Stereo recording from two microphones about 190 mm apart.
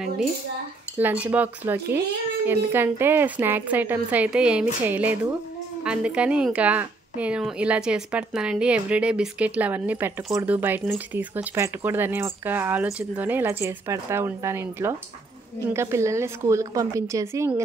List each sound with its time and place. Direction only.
0.9 s a woman's voice: 10° right (ahead or behind)